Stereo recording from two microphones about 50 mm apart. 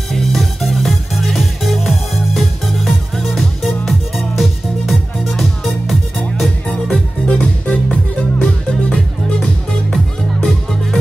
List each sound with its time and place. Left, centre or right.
0.1 s music: centre
6.7 s music: centre